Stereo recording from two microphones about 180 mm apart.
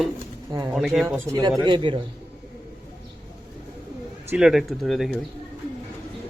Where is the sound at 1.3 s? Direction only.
20° right (ahead or behind).